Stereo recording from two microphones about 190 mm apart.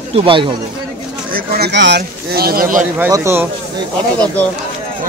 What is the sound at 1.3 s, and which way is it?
Speech, 60° right (ahead or behind).